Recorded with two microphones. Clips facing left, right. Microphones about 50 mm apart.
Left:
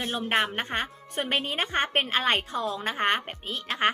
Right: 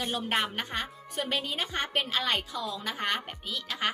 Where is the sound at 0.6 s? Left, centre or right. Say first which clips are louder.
Left 4 dB; left.